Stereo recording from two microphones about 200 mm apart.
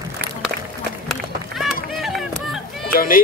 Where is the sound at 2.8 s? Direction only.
45° left (ahead or behind).